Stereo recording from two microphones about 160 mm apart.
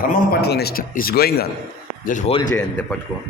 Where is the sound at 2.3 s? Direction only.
40° left (ahead or behind).